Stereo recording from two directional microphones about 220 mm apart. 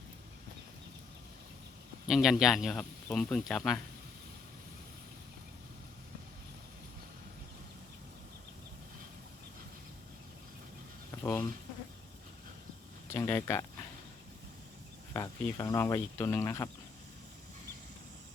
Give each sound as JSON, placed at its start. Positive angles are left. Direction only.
{"t": 2.0, "sound": "speech", "side_deg": 0}
{"t": 11.2, "sound": "speech", "side_deg": 10}
{"t": 13.1, "sound": "speech", "side_deg": 10}
{"t": 15.1, "sound": "speech", "side_deg": 15}